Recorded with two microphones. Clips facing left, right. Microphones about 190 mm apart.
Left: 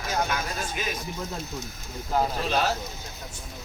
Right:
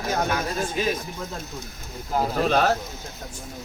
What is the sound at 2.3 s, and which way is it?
Speech, 50° right (ahead or behind).